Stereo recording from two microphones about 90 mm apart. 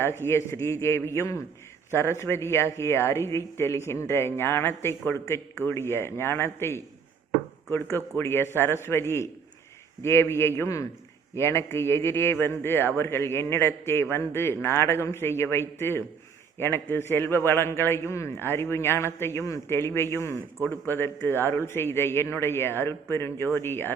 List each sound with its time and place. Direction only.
0.0 s a man's voice: 30° left (ahead or behind)